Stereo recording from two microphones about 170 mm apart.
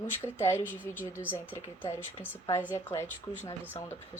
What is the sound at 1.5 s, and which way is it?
Speech, 15° left (ahead or behind).